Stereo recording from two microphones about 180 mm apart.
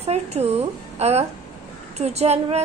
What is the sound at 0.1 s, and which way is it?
A woman's voice, 35° right (ahead or behind).